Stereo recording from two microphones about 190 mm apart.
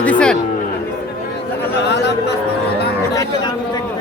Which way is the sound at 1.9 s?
65° left (ahead or behind).